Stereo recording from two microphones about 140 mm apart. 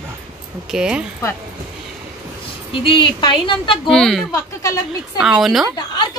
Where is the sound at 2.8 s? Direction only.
35° left (ahead or behind).